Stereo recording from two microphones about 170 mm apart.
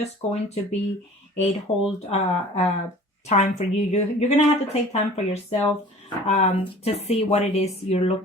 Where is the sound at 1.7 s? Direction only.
35° left (ahead or behind).